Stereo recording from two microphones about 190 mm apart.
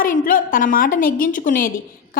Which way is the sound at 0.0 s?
45° left (ahead or behind).